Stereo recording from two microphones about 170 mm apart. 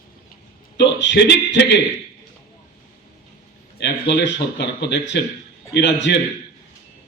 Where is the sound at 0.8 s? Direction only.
90° left.